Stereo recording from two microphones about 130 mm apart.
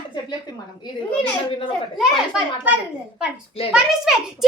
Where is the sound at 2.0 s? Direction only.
5° right (ahead or behind).